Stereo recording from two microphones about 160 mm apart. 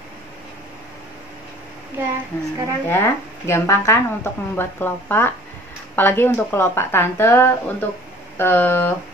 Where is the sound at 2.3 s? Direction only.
15° left (ahead or behind).